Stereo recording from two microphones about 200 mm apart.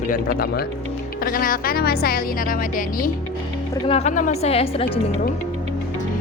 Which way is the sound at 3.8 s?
30° left (ahead or behind).